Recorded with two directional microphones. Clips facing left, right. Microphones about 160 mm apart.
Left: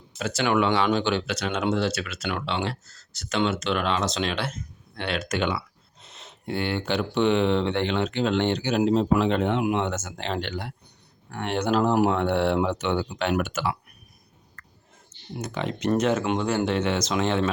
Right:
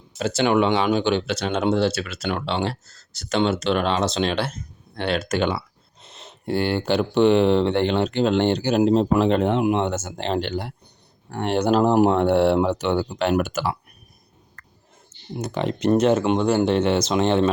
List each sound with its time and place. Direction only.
0.2 s speech: 30° right (ahead or behind)
1.3 s speech: 30° right (ahead or behind)
15.4 s speech: 35° right (ahead or behind)